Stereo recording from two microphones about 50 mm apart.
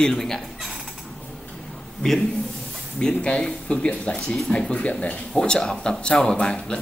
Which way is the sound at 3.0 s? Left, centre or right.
Centre.